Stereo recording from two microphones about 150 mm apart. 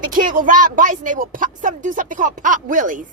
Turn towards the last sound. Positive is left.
turn(degrees=-60)  # may be behind; listen again after turning